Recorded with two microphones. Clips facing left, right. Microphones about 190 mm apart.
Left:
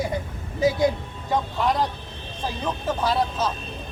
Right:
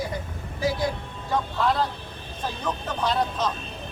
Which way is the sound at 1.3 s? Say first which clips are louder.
Left 1 dB; 15° left (ahead or behind).